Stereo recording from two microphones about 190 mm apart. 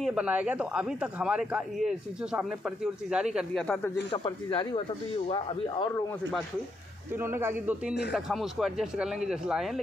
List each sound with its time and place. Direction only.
0.0 s speech: 5° right (ahead or behind)
4.1 s speech: 25° left (ahead or behind)
7.2 s speech: 10° right (ahead or behind)
8.1 s speech: centre (ahead or behind)